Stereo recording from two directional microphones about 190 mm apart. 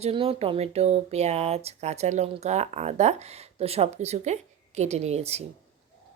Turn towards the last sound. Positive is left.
turn(degrees=-35)  # may be behind; listen again after turning